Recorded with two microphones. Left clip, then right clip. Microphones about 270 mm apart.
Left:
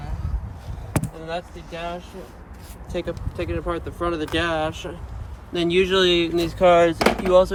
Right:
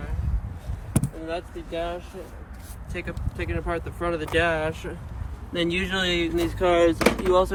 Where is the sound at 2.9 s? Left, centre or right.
Centre.